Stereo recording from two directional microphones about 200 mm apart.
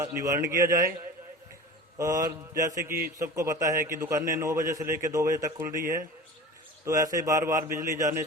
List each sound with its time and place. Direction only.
0.0 s a man's voice: 15° right (ahead or behind)
2.0 s a man's voice: 15° right (ahead or behind)